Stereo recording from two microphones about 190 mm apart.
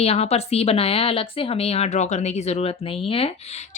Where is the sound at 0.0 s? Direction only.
35° left (ahead or behind).